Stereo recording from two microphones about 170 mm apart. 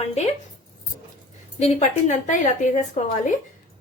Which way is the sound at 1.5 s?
45° left (ahead or behind).